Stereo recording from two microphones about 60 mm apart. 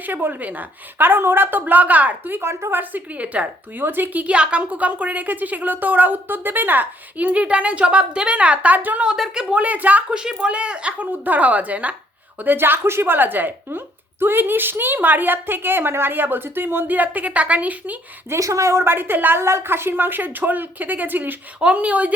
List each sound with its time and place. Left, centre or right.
0.0 s speech: right
2.7 s a woman's voice: right
3.8 s a woman's voice: right
9.3 s a woman's voice: centre
10.1 s a woman's voice: centre
12.4 s speech: right
18.3 s a woman's voice: right
19.4 s a woman's voice: right